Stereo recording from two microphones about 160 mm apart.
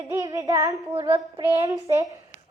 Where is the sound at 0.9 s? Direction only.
35° right (ahead or behind).